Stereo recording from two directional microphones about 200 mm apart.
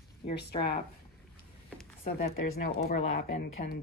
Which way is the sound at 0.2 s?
25° left (ahead or behind).